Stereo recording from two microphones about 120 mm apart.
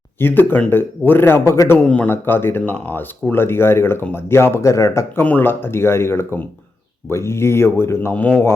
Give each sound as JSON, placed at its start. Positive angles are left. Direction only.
{"t": 0.2, "sound": "speech", "side_deg": 15}